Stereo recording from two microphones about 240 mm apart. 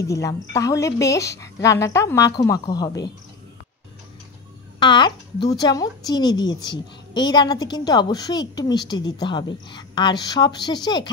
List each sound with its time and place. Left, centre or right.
0.0 s a woman's voice: centre
4.7 s a woman's voice: centre